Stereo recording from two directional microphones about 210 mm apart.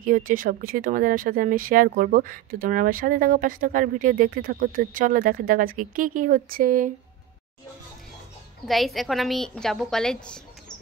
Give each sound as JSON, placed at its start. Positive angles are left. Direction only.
{"t": 0.0, "sound": "speech", "side_deg": -40}
{"t": 8.6, "sound": "a woman's voice", "side_deg": 0}